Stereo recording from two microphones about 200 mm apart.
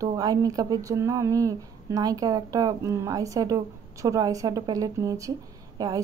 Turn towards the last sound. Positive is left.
turn(degrees=-15)  # may be behind; listen again after turning